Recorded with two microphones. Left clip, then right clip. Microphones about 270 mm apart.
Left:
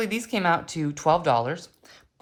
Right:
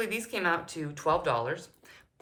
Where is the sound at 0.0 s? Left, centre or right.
Centre.